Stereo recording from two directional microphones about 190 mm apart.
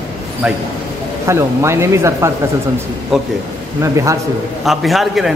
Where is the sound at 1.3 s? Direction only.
15° right (ahead or behind).